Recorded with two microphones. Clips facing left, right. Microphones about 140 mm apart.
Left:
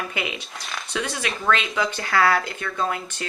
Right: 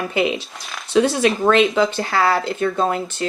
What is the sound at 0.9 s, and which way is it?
Speech, 30° right (ahead or behind).